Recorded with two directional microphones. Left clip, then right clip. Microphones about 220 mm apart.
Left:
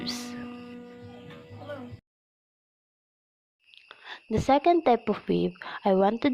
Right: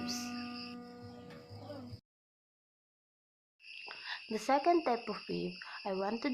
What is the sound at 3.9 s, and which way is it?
Speech, 40° left (ahead or behind).